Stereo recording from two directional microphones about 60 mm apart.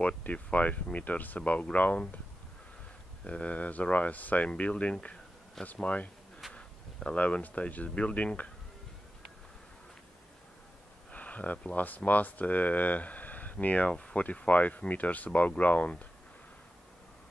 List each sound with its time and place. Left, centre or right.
0.0 s speech: left
3.3 s speech: left
6.5 s a sound: centre
7.2 s speech: left
11.1 s speech: left